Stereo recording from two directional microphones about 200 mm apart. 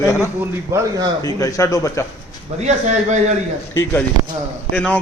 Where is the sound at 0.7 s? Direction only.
15° right (ahead or behind).